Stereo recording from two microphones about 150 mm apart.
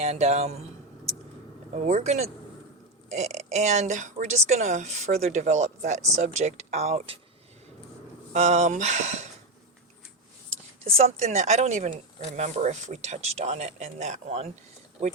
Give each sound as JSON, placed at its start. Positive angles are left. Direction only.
{"t": 0.0, "sound": "speech", "side_deg": -45}
{"t": 1.7, "sound": "speech", "side_deg": -50}
{"t": 8.3, "sound": "speech", "side_deg": -50}
{"t": 10.8, "sound": "speech", "side_deg": -45}